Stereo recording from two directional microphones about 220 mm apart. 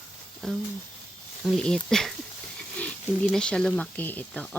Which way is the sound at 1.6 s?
5° left (ahead or behind).